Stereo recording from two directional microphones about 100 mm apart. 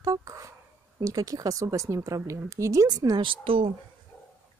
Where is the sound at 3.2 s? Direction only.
60° right (ahead or behind).